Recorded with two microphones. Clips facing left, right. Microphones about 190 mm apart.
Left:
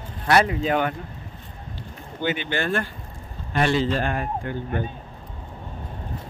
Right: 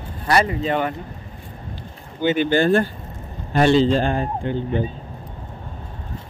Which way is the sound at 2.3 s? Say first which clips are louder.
Right 9 dB; 35° right (ahead or behind).